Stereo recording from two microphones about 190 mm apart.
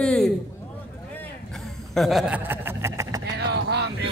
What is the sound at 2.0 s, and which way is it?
Chuckle, centre (ahead or behind).